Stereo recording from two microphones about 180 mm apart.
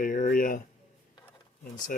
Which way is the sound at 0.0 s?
45° left (ahead or behind).